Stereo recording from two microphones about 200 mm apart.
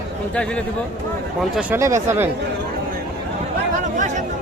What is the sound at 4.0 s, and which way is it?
Speech, 40° right (ahead or behind).